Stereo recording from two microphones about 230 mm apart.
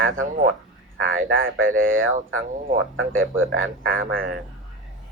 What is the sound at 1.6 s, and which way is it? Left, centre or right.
Speech, right.